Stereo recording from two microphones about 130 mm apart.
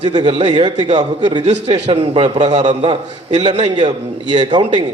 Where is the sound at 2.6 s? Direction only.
35° right (ahead or behind).